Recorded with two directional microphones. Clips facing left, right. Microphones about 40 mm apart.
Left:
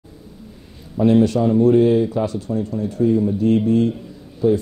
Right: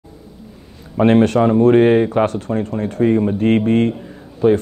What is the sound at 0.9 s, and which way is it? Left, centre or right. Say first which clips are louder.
Speech: right 3 dB; right.